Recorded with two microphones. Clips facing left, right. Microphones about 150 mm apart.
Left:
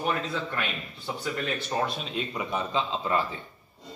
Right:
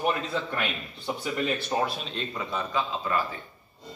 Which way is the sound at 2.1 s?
15° left (ahead or behind).